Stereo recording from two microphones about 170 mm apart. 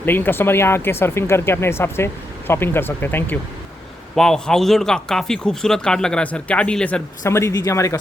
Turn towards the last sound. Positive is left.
turn(degrees=20)  # may be behind; listen again after turning